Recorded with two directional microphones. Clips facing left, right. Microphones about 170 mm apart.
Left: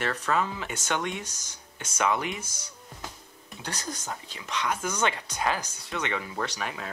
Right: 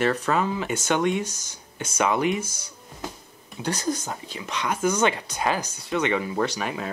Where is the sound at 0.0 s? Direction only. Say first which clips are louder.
Right 5 dB; 20° right (ahead or behind).